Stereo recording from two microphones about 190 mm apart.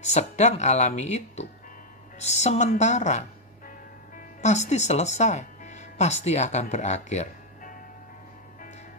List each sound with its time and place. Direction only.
0.0 s a woman's voice: 35° left (ahead or behind)